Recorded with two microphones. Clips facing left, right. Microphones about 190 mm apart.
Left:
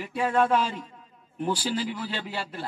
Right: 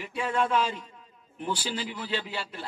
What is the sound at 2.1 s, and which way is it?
Speech, 45° left (ahead or behind).